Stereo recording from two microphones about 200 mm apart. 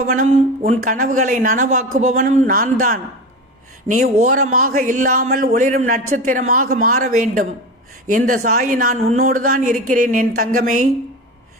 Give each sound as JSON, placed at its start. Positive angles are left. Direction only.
{"t": 0.0, "sound": "a man's voice", "side_deg": -40}
{"t": 3.8, "sound": "a man's voice", "side_deg": -40}